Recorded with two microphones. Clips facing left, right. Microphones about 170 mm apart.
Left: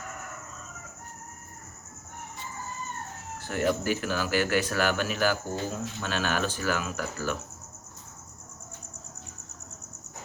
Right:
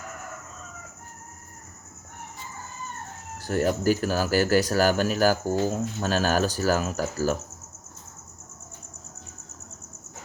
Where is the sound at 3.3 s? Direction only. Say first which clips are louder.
Right 3 dB; 40° right (ahead or behind).